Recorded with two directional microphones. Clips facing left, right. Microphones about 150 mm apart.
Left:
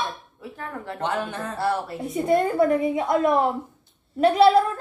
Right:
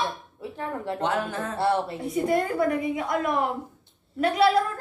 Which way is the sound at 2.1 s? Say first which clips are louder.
Left 3 dB; 25° left (ahead or behind).